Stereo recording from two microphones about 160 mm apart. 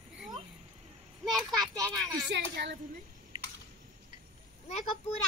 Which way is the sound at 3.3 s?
30° right (ahead or behind).